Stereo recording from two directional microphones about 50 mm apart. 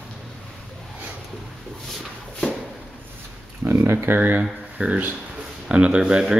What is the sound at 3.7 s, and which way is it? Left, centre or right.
Speech, right.